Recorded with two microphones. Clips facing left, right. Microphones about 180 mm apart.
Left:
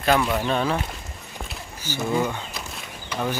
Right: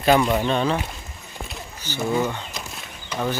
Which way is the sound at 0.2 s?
15° right (ahead or behind).